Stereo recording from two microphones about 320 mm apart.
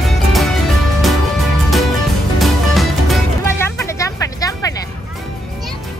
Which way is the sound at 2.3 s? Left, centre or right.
Centre.